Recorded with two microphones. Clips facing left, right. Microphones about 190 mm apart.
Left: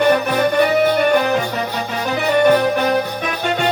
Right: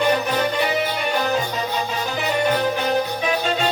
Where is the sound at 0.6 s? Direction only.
55° left (ahead or behind).